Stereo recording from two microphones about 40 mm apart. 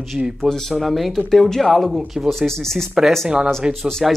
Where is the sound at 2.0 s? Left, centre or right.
Centre.